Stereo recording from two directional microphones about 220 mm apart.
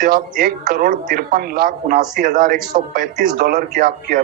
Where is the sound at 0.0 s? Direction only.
40° right (ahead or behind).